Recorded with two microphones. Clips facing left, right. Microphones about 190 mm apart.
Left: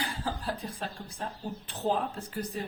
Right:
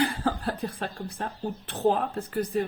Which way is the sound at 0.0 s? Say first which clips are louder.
Right 8 dB; 60° right (ahead or behind).